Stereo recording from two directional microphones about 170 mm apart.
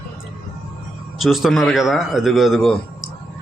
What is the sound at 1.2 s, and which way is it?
A man's voice, centre (ahead or behind).